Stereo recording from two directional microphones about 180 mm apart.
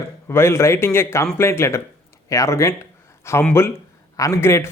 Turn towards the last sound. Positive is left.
turn(degrees=15)  # may be behind; listen again after turning